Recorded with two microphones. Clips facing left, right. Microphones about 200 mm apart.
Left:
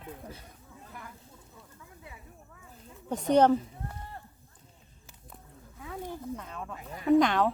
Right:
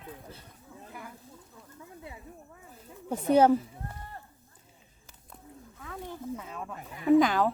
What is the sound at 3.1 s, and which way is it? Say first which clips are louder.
Speech: right 1 dB; 5° right (ahead or behind).